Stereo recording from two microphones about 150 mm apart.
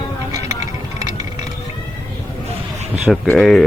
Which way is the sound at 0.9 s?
25° right (ahead or behind).